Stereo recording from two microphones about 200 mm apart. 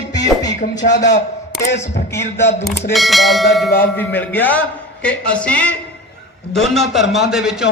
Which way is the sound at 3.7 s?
10° left (ahead or behind).